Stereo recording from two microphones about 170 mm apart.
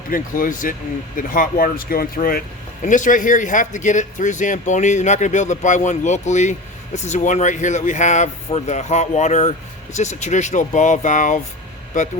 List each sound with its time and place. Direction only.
0.1 s speech: 55° left (ahead or behind)
2.8 s speech: 50° left (ahead or behind)